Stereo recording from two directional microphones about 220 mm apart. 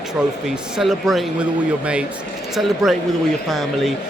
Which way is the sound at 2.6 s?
Centre (ahead or behind).